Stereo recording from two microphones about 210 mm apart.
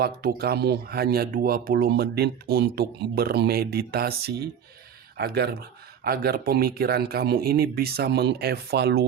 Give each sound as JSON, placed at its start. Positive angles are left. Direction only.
{"t": 0.0, "sound": "speech", "side_deg": -45}